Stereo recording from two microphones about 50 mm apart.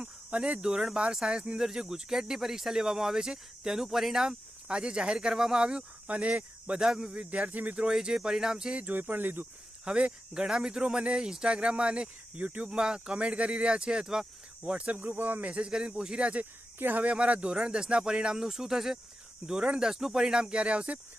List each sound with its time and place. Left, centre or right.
0.0 s speech: right
6.8 s speech: centre
7.2 s speech: right
7.9 s speech: centre
8.7 s speech: right
9.8 s speech: right
14.6 s speech: right
15.0 s speech: right
15.4 s speech: centre
16.7 s speech: right
17.0 s speech: right; by 18.9 s centre
19.4 s speech: centre
19.8 s speech: centre; by 21.0 s right